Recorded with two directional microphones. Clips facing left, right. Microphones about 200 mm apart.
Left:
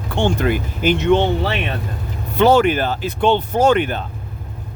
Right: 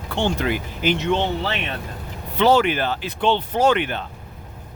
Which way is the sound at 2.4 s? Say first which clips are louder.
Left 4 dB; 50° left (ahead or behind).